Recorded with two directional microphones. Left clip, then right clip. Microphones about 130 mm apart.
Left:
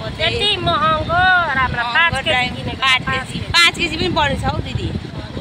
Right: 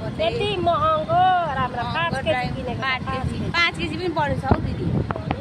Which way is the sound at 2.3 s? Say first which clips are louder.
Left 6 dB; 20° left (ahead or behind).